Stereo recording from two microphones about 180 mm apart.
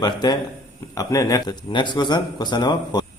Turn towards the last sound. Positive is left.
turn(degrees=25)  # may be behind; listen again after turning